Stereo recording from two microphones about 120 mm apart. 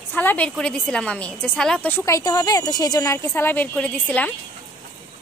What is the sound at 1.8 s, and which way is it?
A woman's voice, 20° left (ahead or behind).